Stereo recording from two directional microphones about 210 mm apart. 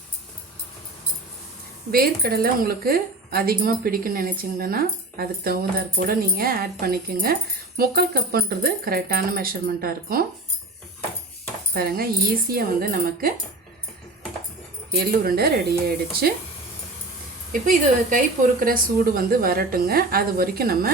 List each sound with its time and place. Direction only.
1.9 s speech: 45° right (ahead or behind)
11.7 s speech: 45° right (ahead or behind)
14.9 s speech: 45° right (ahead or behind)
17.5 s a woman's voice: 35° right (ahead or behind)